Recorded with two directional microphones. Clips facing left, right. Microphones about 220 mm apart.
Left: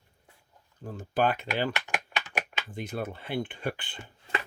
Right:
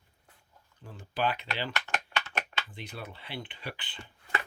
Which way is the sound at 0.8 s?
45° left (ahead or behind).